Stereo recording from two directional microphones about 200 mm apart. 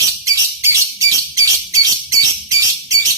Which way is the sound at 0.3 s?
15° right (ahead or behind).